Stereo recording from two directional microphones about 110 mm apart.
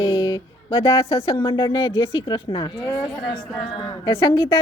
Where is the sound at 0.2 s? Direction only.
35° left (ahead or behind).